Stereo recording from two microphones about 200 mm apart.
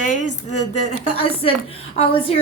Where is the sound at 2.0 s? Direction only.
30° left (ahead or behind).